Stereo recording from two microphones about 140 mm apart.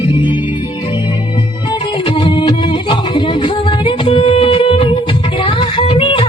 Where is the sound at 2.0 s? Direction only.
35° left (ahead or behind).